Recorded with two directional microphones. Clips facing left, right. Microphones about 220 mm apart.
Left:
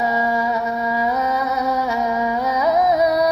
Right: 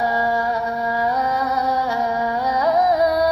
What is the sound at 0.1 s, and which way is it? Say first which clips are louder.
Music: left 1 dB; 20° left (ahead or behind).